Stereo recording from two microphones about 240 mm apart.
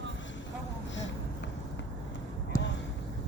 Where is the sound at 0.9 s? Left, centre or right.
Left.